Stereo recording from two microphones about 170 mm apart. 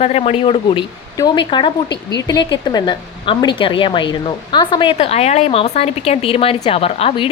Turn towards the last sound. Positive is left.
turn(degrees=35)  # may be behind; listen again after turning